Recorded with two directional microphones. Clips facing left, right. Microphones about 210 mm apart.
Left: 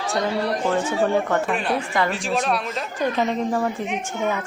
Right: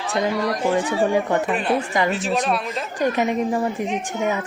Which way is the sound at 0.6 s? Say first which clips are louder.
Right 2 dB; 10° right (ahead or behind).